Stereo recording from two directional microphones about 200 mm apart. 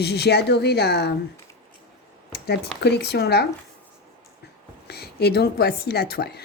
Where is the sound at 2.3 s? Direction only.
55° left (ahead or behind).